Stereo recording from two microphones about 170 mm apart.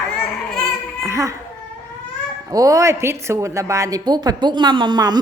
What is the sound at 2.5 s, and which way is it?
A woman's voice, 20° right (ahead or behind).